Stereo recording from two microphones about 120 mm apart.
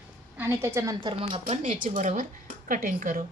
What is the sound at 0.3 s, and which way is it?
Speech, 20° right (ahead or behind).